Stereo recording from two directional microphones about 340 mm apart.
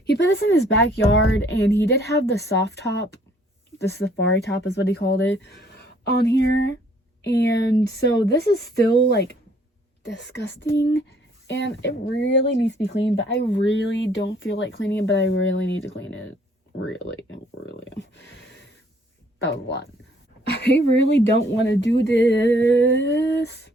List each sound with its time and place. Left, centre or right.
0.0 s speech: left